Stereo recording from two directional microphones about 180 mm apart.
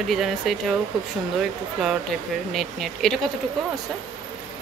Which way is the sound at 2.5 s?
Centre (ahead or behind).